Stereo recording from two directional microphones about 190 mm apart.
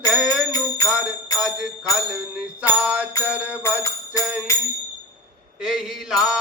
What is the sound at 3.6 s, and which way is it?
Music, 15° left (ahead or behind).